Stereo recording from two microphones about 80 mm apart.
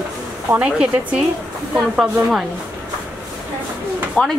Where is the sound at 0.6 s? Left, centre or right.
Centre.